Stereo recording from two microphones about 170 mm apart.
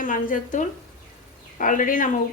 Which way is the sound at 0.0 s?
50° left (ahead or behind).